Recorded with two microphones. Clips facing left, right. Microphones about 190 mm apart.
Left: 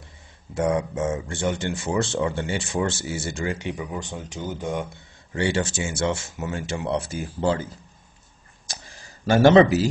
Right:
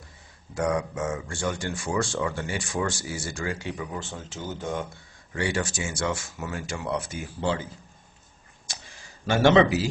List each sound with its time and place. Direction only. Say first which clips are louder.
0.6 s speech: left 3 dB; 25° left (ahead or behind)
5.3 s speech: left 4 dB; 25° left (ahead or behind)
9.2 s a man's voice: left 4 dB; 40° left (ahead or behind)